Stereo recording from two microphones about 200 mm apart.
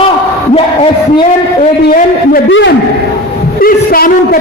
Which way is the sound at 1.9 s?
45° left (ahead or behind).